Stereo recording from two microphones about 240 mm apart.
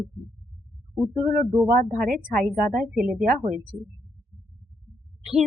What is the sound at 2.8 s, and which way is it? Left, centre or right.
Speech, centre.